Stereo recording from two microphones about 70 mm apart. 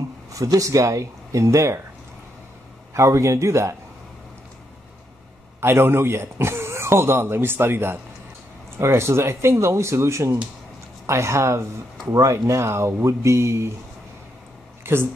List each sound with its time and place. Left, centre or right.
0.3 s speech: right
2.9 s speech: right
5.6 s speech: right
14.8 s speech: right